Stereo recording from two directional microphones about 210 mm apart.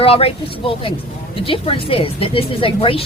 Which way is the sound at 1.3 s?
25° left (ahead or behind).